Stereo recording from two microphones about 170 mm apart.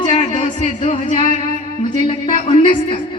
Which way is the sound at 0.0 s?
30° left (ahead or behind).